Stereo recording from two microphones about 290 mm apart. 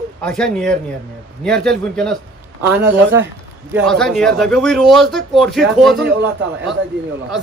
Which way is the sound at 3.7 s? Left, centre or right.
Centre.